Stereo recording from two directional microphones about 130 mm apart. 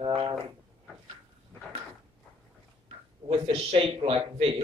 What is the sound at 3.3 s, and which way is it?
A man's voice, 50° right (ahead or behind).